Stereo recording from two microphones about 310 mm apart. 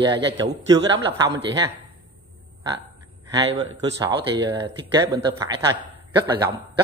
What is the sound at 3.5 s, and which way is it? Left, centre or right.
Speech, right.